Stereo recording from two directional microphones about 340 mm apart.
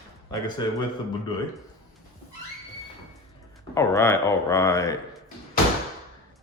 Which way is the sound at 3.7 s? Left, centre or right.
Centre.